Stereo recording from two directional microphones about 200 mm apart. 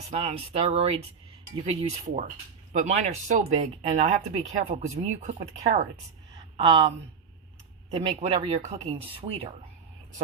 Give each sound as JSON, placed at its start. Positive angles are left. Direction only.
{"t": 0.2, "sound": "speech", "side_deg": -30}
{"t": 6.6, "sound": "speech", "side_deg": -25}